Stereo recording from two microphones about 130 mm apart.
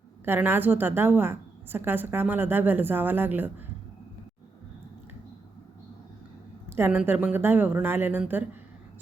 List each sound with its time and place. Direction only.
0.3 s a woman's voice: 15° right (ahead or behind)
6.7 s a woman's voice: 15° right (ahead or behind)